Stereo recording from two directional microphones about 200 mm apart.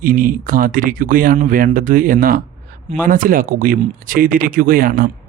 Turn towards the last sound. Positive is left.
turn(degrees=-45)  # may be behind; listen again after turning